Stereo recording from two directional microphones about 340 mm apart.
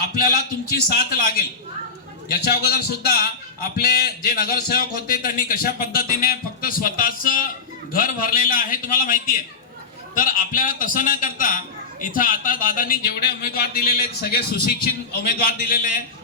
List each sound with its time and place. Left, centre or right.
0.0 s a man's voice: left
2.5 s a man's voice: left